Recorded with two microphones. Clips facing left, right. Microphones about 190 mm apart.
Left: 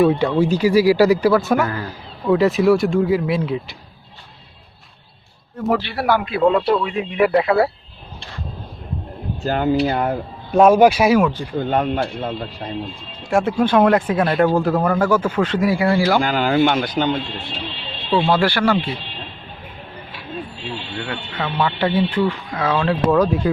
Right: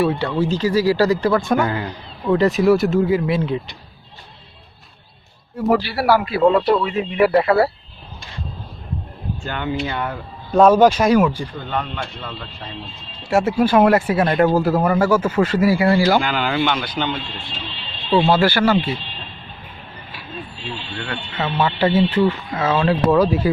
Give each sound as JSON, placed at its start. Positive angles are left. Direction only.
{"t": 0.0, "sound": "speech", "side_deg": 15}
{"t": 1.6, "sound": "a man's voice", "side_deg": -25}
{"t": 2.3, "sound": "a man's voice", "side_deg": 0}
{"t": 5.5, "sound": "a man's voice", "side_deg": -5}
{"t": 9.4, "sound": "speech", "side_deg": 40}
{"t": 10.5, "sound": "speech", "side_deg": 10}
{"t": 11.2, "sound": "speech", "side_deg": -10}
{"t": 11.5, "sound": "speech", "side_deg": 45}
{"t": 13.3, "sound": "speech", "side_deg": -5}
{"t": 16.2, "sound": "speech", "side_deg": 40}
{"t": 18.1, "sound": "a man's voice", "side_deg": -5}
{"t": 20.9, "sound": "speech", "side_deg": 20}
{"t": 21.3, "sound": "a man's voice", "side_deg": -5}